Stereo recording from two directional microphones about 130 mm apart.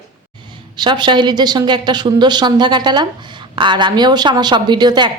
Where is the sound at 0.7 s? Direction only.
35° right (ahead or behind).